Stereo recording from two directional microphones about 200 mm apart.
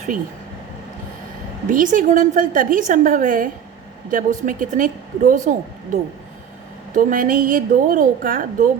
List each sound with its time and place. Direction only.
1.7 s a woman's voice: 40° right (ahead or behind)